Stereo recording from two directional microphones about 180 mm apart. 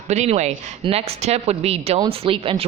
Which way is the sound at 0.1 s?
40° right (ahead or behind).